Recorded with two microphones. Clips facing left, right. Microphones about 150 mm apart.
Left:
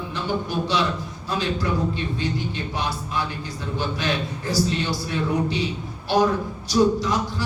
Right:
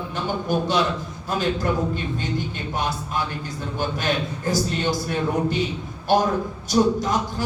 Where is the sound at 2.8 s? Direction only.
50° right (ahead or behind).